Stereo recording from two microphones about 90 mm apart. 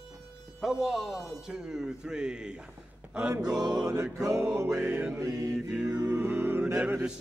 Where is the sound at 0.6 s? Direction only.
5° right (ahead or behind).